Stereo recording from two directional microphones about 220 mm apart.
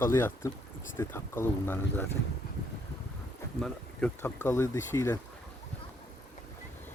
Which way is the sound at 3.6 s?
5° left (ahead or behind).